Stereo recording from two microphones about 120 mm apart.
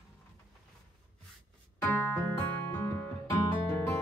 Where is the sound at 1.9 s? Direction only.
20° left (ahead or behind).